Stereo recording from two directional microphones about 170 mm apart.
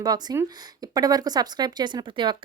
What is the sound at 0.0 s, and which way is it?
Speech, 25° right (ahead or behind).